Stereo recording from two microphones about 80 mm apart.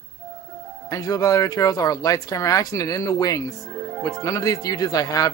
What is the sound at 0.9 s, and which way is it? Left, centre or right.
Speech, left.